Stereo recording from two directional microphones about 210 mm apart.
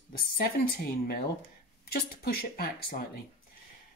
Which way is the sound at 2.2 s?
45° left (ahead or behind).